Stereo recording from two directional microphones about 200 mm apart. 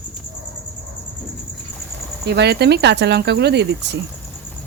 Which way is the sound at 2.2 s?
55° right (ahead or behind).